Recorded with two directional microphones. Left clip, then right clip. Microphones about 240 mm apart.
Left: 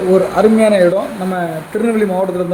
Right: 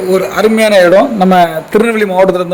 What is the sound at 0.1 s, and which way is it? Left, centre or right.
A man's voice, right.